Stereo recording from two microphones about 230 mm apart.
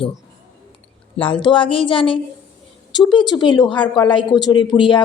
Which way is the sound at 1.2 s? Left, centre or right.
Left.